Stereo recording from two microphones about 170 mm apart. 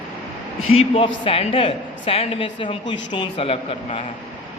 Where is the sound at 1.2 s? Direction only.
35° left (ahead or behind).